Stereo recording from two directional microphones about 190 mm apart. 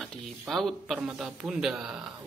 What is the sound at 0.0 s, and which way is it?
Speech, centre (ahead or behind).